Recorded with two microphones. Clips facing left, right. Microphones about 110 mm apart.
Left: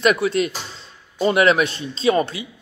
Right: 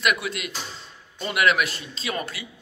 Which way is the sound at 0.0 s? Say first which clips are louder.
Left 8 dB; 35° left (ahead or behind).